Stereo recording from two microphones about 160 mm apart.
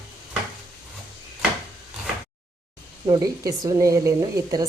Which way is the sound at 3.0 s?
25° right (ahead or behind).